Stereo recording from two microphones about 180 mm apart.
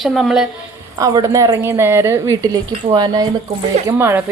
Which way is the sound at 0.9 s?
20° right (ahead or behind).